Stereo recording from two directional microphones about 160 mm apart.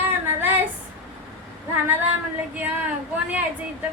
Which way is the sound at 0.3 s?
10° right (ahead or behind).